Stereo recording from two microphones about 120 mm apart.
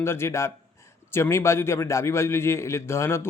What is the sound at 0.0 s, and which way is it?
A man's voice, 20° left (ahead or behind).